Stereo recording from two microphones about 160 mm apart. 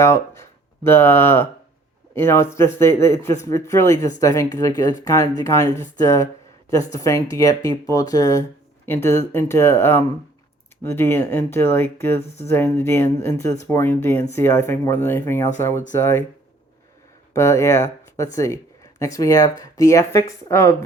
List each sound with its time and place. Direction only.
0.0 s speech: 15° left (ahead or behind)
17.3 s speech: 15° left (ahead or behind)